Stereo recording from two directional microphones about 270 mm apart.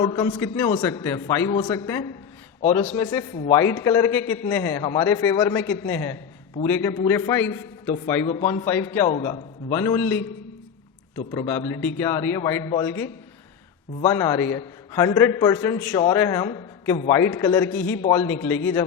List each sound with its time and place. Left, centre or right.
0.0 s a man's voice: centre
3.6 s a man's voice: centre
18.0 s speech: left
18.3 s a man's voice: centre